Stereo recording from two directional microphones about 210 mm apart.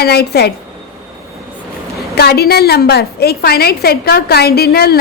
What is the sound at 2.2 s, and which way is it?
Speech, 50° left (ahead or behind).